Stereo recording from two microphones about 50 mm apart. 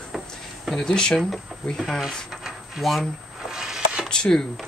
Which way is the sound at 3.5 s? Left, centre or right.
Centre.